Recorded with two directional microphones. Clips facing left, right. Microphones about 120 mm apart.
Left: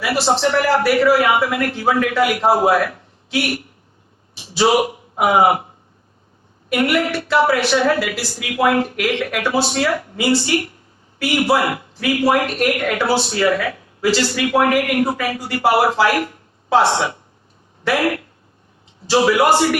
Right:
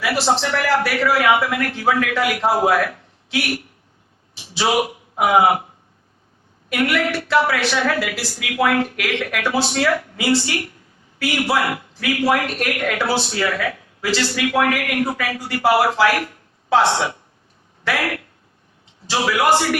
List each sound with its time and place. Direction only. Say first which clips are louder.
0.0 s speech: left 2 dB; 30° left (ahead or behind)
4.5 s a man's voice: left 4 dB; 30° left (ahead or behind)
6.7 s speech: left 2 dB; 30° left (ahead or behind)